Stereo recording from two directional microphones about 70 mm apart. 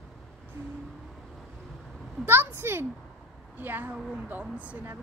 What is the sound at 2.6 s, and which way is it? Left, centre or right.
A child's voice, right.